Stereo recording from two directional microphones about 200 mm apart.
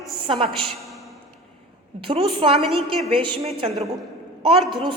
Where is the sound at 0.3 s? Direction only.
30° right (ahead or behind).